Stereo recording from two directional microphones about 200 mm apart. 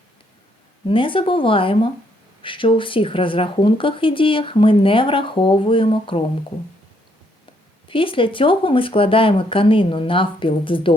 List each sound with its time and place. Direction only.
0.9 s speech: 25° left (ahead or behind)
7.9 s speech: 25° left (ahead or behind)